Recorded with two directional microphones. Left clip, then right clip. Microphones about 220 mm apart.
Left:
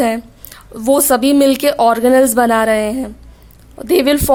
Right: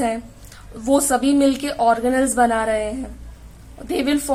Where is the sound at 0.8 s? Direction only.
45° left (ahead or behind).